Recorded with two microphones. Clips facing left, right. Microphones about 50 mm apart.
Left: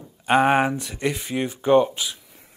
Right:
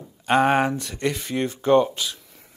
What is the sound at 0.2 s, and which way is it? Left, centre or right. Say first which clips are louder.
Speech: left 1 dB; centre.